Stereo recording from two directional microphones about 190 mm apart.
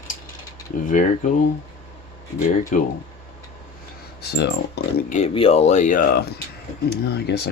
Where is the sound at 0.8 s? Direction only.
40° left (ahead or behind).